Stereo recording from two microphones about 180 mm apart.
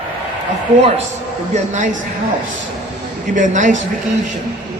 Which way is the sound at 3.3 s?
45° right (ahead or behind).